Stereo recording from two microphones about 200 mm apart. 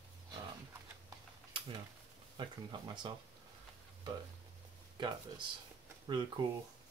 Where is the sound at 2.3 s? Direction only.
20° right (ahead or behind).